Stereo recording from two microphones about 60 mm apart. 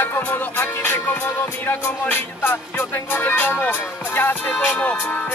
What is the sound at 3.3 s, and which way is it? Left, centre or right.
Speech, left.